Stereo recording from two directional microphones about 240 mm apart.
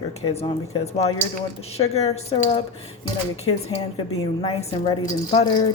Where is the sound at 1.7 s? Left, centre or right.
Left.